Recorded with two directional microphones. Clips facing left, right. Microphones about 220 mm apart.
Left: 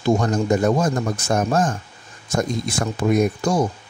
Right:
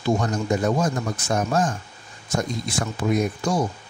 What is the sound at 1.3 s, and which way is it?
Speech, 45° left (ahead or behind).